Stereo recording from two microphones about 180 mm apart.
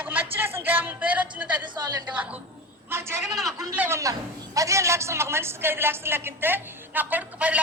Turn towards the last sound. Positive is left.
turn(degrees=-10)  # may be behind; listen again after turning